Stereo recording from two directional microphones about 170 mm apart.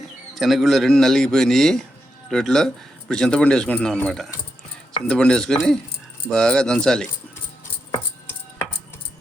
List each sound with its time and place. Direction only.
0.3 s speech: centre (ahead or behind)
7.9 s rattle: 15° left (ahead or behind)